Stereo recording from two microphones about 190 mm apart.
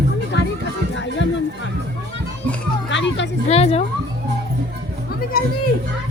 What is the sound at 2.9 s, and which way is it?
Music, 70° left (ahead or behind).